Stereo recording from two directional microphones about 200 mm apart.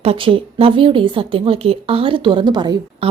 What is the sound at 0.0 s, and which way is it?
A woman's voice, 30° right (ahead or behind).